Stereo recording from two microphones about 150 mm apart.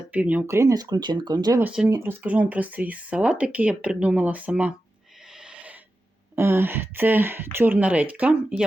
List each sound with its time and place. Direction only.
0.1 s speech: 10° right (ahead or behind); by 1.6 s 25° right (ahead or behind)
1.6 s speech: 5° right (ahead or behind)
5.4 s a sound: 5° right (ahead or behind)
6.3 s speech: 15° right (ahead or behind)